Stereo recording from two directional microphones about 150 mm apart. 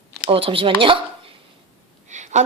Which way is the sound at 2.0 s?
50° right (ahead or behind).